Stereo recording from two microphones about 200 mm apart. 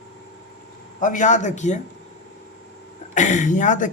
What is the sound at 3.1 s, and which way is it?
Speech, 40° left (ahead or behind).